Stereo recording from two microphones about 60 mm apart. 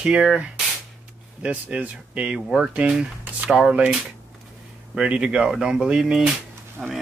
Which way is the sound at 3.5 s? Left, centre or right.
Centre.